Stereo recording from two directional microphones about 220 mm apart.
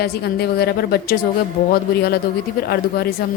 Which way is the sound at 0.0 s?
45° left (ahead or behind).